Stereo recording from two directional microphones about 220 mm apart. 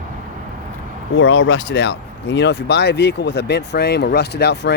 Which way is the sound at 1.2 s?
55° left (ahead or behind).